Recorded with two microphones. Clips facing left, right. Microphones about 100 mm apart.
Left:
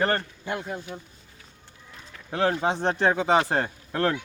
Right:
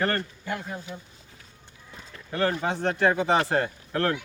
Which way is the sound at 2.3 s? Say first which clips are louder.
Left 2 dB; 20° left (ahead or behind).